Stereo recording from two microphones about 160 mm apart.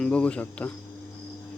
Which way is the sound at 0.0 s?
5° left (ahead or behind).